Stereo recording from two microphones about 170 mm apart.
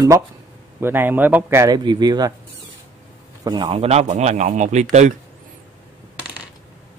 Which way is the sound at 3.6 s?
35° right (ahead or behind).